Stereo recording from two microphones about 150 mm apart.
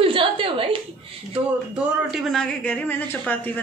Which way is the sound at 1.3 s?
5° right (ahead or behind).